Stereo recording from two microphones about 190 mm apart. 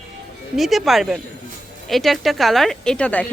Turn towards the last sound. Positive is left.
turn(degrees=5)  # may be behind; listen again after turning